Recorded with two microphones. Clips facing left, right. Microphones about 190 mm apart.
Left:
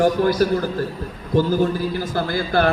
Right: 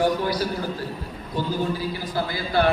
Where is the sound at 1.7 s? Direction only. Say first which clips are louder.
Left 4 dB; 50° left (ahead or behind).